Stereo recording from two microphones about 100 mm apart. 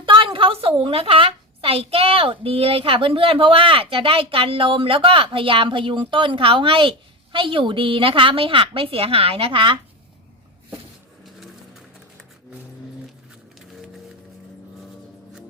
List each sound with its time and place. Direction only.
0.0 s a woman's voice: 60° right (ahead or behind)